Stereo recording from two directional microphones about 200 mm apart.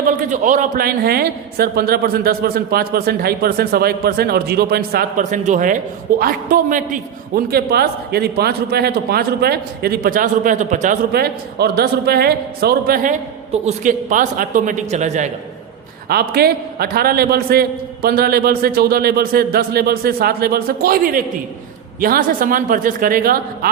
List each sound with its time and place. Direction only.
0.2 s a man's voice: 40° right (ahead or behind)
16.0 s a man's voice: 50° right (ahead or behind)